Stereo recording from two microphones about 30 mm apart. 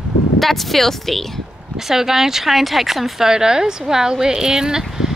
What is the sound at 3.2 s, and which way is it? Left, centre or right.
A woman's voice, right.